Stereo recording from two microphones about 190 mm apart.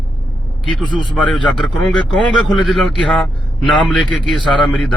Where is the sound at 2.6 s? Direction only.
Centre (ahead or behind).